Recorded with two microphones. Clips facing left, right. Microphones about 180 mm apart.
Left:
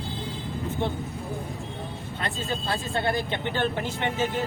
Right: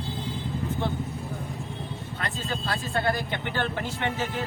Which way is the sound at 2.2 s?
25° left (ahead or behind).